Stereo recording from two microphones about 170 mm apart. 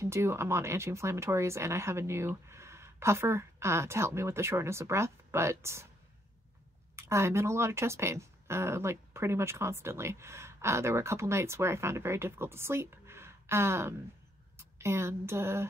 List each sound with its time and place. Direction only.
0.0 s speech: 15° right (ahead or behind)
7.0 s speech: 15° right (ahead or behind)